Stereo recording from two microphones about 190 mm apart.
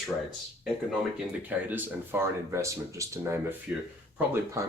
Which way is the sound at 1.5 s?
10° right (ahead or behind).